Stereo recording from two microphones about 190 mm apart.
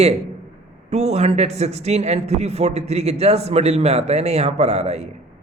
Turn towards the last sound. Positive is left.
turn(degrees=-35)  # may be behind; listen again after turning